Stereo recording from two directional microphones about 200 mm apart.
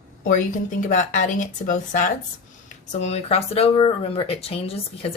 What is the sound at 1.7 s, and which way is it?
A woman's voice, 40° left (ahead or behind).